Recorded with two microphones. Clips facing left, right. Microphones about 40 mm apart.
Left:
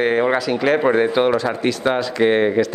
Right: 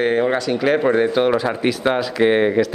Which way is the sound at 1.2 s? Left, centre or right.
Centre.